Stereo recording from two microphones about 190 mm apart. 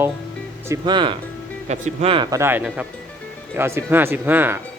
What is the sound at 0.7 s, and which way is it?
Speech, 25° right (ahead or behind).